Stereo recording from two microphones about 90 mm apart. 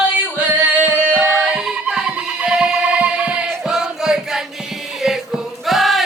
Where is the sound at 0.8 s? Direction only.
20° right (ahead or behind).